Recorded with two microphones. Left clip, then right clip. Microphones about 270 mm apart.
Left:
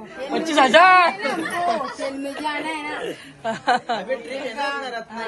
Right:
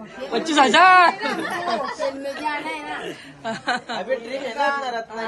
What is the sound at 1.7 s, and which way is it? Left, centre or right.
Speech, right.